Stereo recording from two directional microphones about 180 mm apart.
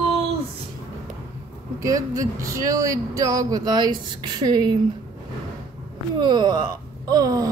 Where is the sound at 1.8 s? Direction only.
20° right (ahead or behind).